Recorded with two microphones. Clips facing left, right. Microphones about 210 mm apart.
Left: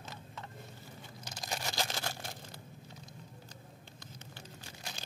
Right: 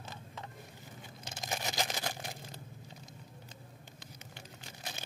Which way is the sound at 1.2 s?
20° right (ahead or behind).